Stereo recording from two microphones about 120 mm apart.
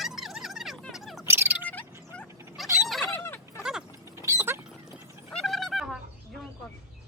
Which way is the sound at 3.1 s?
20° left (ahead or behind).